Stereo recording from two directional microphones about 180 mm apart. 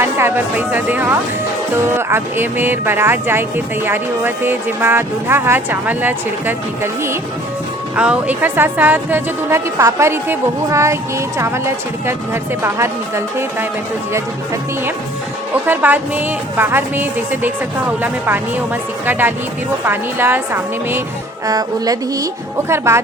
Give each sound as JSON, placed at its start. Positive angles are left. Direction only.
{"t": 0.0, "sound": "speech", "side_deg": -15}
{"t": 15.5, "sound": "speech", "side_deg": -10}